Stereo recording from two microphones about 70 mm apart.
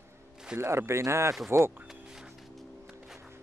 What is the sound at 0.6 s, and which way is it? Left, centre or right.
Speech, right.